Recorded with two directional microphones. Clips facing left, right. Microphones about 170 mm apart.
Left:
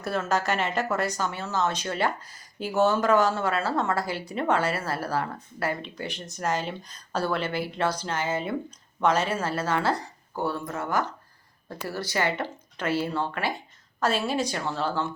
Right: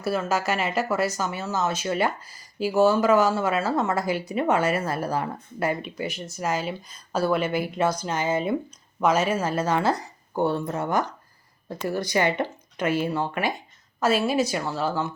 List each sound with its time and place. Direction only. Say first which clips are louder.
0.0 s speech: right 2 dB; 5° right (ahead or behind)